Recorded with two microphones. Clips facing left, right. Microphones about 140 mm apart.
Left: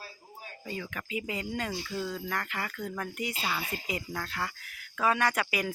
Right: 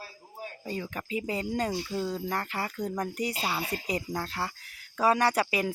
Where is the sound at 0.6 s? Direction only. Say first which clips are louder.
Right 2 dB; 30° right (ahead or behind).